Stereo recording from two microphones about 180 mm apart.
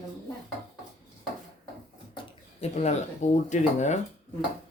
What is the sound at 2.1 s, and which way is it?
Speech, 30° left (ahead or behind).